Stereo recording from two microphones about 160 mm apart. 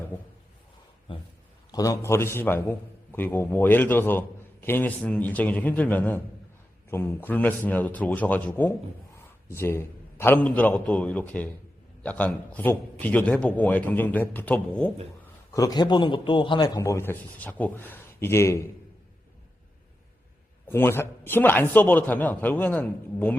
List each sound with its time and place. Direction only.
1.1 s a man's voice: 30° left (ahead or behind); by 14.9 s 10° left (ahead or behind)
15.5 s a man's voice: 25° left (ahead or behind)
20.7 s a man's voice: 15° left (ahead or behind)